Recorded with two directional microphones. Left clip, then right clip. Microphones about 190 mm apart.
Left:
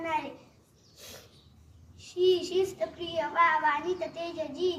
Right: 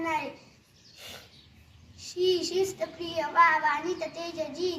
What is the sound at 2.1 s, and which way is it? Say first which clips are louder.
A child's voice: left 1 dB; 20° left (ahead or behind).